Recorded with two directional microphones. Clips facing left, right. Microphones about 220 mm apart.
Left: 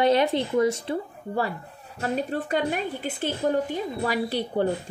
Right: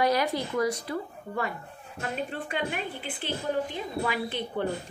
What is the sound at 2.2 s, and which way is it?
A woman's voice, 40° left (ahead or behind).